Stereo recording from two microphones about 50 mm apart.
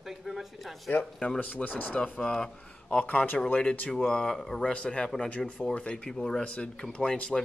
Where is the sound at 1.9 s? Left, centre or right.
Left.